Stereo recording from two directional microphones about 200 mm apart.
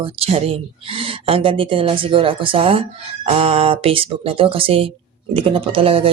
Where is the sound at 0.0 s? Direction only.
30° right (ahead or behind).